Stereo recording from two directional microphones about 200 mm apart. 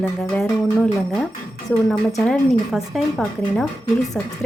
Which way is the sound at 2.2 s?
Centre (ahead or behind).